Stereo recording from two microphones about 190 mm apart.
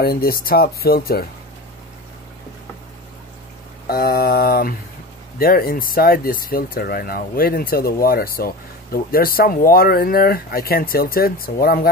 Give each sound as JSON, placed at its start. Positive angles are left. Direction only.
{"t": 0.0, "sound": "speech", "side_deg": 50}
{"t": 3.8, "sound": "speech", "side_deg": 55}